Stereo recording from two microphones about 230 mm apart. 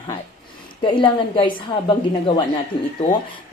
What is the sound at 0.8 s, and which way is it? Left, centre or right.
Speech, left.